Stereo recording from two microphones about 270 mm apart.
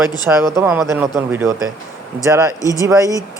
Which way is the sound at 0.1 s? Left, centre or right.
Centre.